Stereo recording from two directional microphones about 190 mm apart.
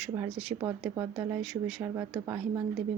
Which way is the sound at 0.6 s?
15° right (ahead or behind).